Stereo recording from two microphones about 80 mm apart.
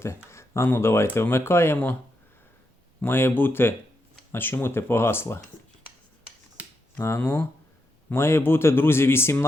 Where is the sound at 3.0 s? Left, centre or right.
Left.